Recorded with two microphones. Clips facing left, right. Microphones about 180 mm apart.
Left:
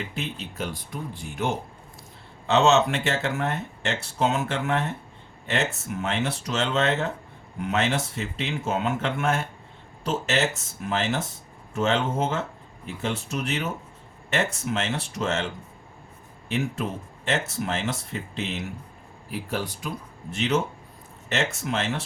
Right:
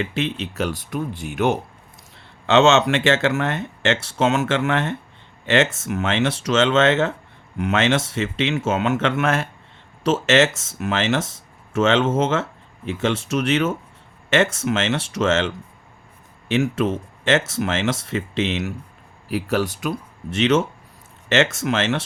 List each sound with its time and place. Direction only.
0.0 s speech: 90° right; by 1.5 s 75° right (ahead or behind)
2.5 s speech: 90° right